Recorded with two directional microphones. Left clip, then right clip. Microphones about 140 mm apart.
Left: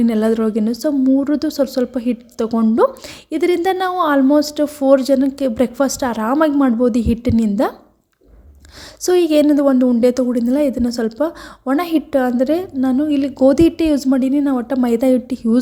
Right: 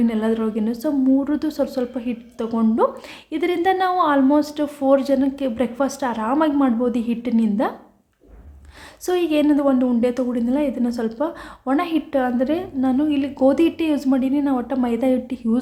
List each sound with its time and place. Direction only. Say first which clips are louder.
0.0 s a woman's voice: left 5 dB; 45° left (ahead or behind)
9.0 s a woman's voice: left 6 dB; 45° left (ahead or behind)